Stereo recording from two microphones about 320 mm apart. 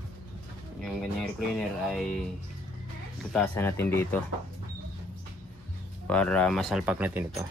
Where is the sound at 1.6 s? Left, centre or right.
Centre.